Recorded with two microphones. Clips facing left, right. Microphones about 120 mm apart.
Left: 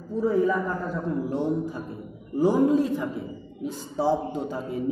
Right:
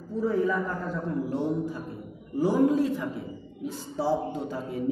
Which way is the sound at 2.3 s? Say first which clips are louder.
Left 2 dB; 20° left (ahead or behind).